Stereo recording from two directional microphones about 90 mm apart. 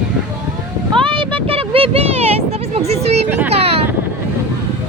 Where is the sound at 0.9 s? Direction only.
70° right (ahead or behind); by 2.8 s 90° right.